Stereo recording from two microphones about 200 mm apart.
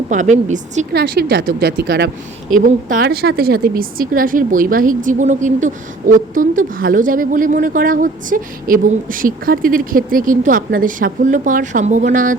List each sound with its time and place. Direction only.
0.1 s a woman's voice: 35° right (ahead or behind)
0.9 s a woman's voice: 50° right (ahead or behind)
2.5 s a woman's voice: 40° right (ahead or behind)